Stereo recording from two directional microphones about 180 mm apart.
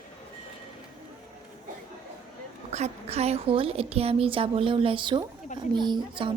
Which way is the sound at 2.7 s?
35° right (ahead or behind).